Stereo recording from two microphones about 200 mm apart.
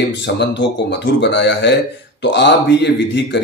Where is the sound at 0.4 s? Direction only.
60° left (ahead or behind).